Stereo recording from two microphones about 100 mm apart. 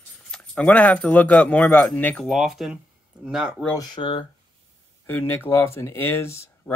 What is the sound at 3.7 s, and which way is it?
Speech, 45° left (ahead or behind).